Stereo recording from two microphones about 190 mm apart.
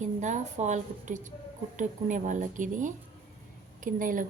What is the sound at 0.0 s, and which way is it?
A woman's voice, 40° right (ahead or behind).